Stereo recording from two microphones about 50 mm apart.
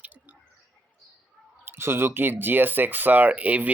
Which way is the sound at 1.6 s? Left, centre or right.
Right.